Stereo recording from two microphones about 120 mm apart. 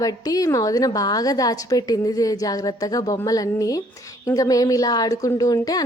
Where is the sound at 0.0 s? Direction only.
30° left (ahead or behind).